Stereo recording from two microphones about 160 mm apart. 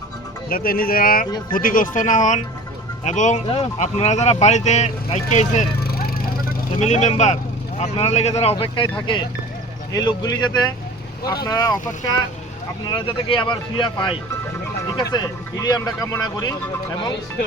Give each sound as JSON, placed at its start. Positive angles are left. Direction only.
{"t": 0.5, "sound": "speech", "side_deg": 65}
{"t": 5.8, "sound": "a sound", "side_deg": 70}
{"t": 6.7, "sound": "speech", "side_deg": 45}
{"t": 9.9, "sound": "speech", "side_deg": 25}